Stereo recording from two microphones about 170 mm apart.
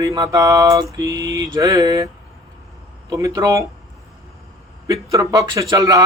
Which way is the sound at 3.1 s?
20° right (ahead or behind).